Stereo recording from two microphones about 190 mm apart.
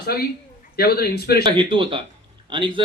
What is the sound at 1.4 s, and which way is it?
A man's voice, 25° right (ahead or behind).